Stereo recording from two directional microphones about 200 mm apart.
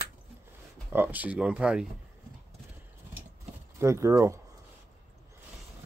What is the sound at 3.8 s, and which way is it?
Speech, 15° right (ahead or behind).